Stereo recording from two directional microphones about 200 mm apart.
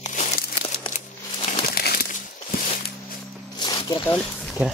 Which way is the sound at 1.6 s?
45° left (ahead or behind).